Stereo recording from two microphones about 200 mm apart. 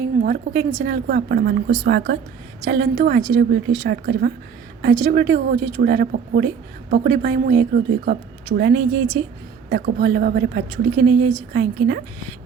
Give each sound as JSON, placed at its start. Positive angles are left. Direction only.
{"t": 0.2, "sound": "a woman's voice", "side_deg": -45}
{"t": 9.6, "sound": "a woman's voice", "side_deg": -45}